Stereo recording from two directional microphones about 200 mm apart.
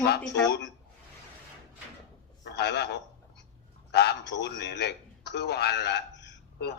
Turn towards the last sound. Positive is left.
turn(degrees=60)  # may be behind; listen again after turning